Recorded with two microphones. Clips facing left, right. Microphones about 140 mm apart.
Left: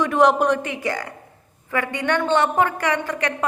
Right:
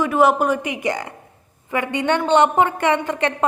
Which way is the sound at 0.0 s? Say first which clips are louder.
Even; 5° right (ahead or behind).